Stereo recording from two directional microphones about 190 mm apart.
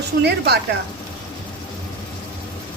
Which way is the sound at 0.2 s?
60° right (ahead or behind).